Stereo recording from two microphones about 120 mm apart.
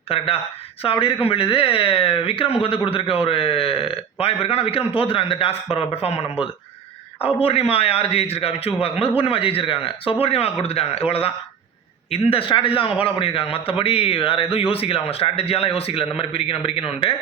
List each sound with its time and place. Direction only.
0.1 s a man's voice: 55° left (ahead or behind)